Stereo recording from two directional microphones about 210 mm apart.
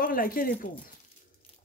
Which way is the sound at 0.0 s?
45° left (ahead or behind).